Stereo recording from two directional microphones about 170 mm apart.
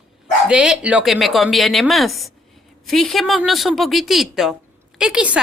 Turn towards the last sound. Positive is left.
turn(degrees=-5)  # may be behind; listen again after turning